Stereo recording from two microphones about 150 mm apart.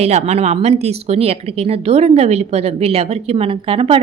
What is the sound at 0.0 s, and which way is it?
A woman's voice, 45° right (ahead or behind).